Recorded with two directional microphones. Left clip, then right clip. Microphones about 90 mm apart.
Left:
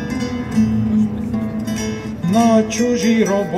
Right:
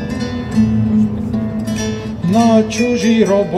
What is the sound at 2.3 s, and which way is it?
Music, 30° right (ahead or behind).